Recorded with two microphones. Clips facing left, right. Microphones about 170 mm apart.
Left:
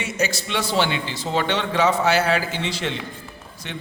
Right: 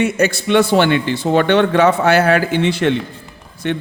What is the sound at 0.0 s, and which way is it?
A man's voice, 55° right (ahead or behind).